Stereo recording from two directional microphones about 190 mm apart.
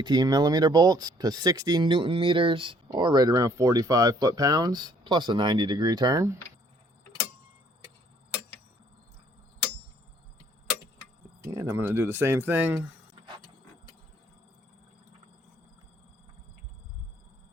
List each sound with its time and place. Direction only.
0.0 s speech: 20° right (ahead or behind)
11.4 s speech: 15° right (ahead or behind)